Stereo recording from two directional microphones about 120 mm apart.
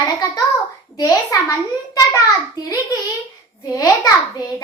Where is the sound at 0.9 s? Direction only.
30° left (ahead or behind).